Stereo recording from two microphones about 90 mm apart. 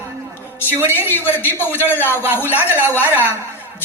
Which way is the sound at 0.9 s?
25° left (ahead or behind).